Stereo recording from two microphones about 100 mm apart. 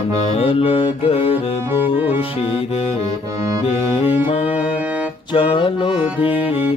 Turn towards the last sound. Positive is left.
turn(degrees=-15)  # may be behind; listen again after turning